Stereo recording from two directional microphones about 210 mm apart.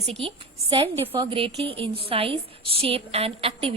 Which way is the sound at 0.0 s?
30° right (ahead or behind).